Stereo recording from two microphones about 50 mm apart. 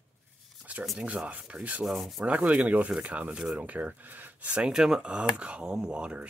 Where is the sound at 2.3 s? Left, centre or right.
Right.